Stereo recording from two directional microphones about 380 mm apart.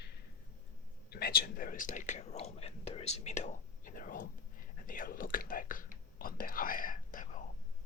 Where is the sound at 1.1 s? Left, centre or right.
Left.